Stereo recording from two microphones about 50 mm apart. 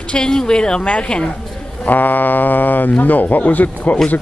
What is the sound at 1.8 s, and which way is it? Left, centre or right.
Speech, left.